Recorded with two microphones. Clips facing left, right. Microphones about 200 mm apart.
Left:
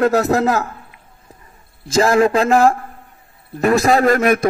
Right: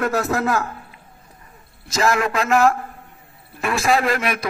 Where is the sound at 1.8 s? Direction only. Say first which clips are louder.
Left 7 dB; 30° left (ahead or behind).